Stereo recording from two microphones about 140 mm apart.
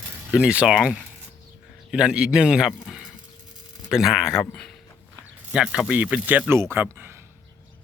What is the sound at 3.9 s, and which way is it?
A man's voice, 5° right (ahead or behind).